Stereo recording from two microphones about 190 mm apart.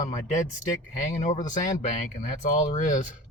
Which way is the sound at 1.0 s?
40° left (ahead or behind).